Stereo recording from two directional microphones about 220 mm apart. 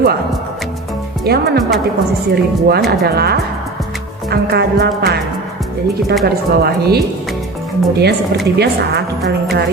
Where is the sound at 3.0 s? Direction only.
45° right (ahead or behind).